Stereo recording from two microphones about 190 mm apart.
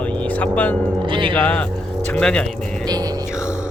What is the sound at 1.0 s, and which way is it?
Music, 25° right (ahead or behind).